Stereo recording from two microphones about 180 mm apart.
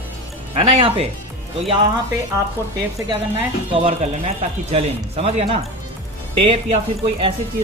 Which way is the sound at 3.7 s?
30° right (ahead or behind).